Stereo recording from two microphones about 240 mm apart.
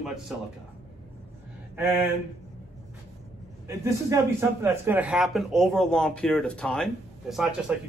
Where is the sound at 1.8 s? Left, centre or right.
Centre.